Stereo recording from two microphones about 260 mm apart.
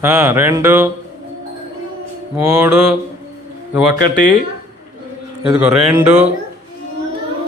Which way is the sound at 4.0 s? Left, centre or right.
Left.